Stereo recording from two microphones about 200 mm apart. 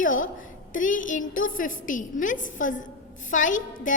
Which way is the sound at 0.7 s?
40° left (ahead or behind).